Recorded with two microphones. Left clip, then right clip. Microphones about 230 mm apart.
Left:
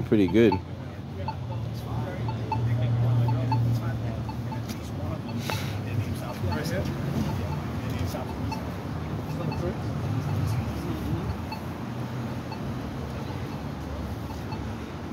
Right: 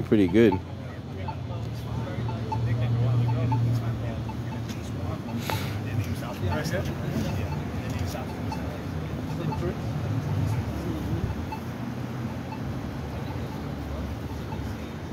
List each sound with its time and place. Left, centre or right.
0.1 s speech: centre